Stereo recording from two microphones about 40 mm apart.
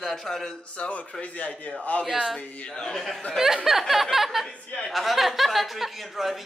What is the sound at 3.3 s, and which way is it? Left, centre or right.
A woman's voice, centre.